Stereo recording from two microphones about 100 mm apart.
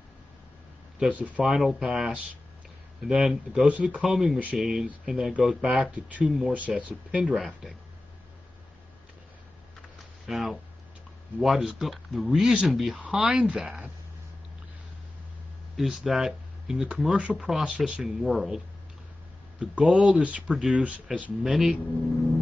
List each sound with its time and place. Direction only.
0.9 s speech: 10° right (ahead or behind)
1.4 s speech: centre (ahead or behind)
10.2 s speech: centre (ahead or behind)
15.7 s speech: centre (ahead or behind)
19.6 s speech: 5° right (ahead or behind)